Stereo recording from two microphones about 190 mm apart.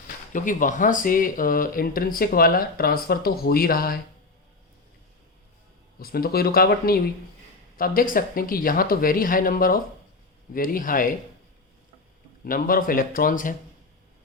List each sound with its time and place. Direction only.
0.3 s speech: 45° left (ahead or behind)
6.0 s speech: 50° left (ahead or behind)
12.5 s speech: 50° left (ahead or behind)